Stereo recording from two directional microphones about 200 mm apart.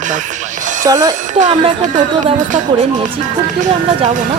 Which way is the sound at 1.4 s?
35° right (ahead or behind).